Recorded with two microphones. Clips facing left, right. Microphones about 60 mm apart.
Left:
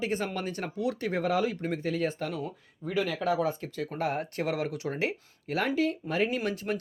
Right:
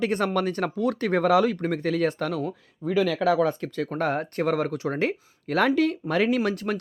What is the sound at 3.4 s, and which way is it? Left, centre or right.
Speech, right.